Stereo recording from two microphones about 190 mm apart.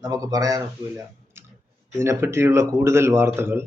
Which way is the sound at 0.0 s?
20° right (ahead or behind).